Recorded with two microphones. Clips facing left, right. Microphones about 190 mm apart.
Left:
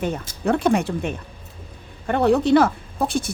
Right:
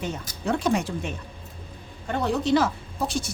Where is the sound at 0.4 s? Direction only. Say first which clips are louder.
Left 5 dB; 60° left (ahead or behind).